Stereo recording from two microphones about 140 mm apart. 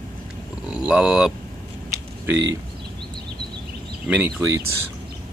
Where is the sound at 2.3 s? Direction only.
20° right (ahead or behind).